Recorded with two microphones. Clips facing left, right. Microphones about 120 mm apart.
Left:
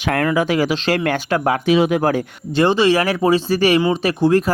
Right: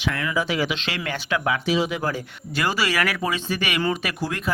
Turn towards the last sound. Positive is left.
turn(degrees=30)  # may be behind; listen again after turning